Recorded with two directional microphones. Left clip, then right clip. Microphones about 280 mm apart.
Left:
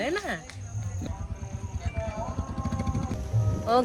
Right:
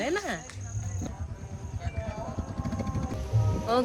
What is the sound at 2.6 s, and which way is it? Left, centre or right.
Music, right.